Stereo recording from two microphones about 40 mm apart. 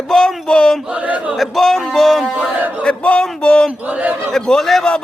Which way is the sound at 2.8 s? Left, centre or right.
Left.